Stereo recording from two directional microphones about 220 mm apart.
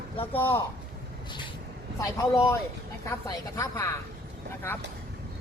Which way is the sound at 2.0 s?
15° left (ahead or behind).